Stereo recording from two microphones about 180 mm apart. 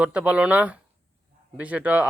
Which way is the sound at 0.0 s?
5° right (ahead or behind).